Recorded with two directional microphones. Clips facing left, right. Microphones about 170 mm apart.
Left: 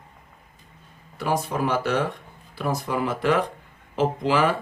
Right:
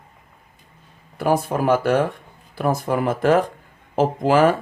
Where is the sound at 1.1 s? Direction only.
50° right (ahead or behind).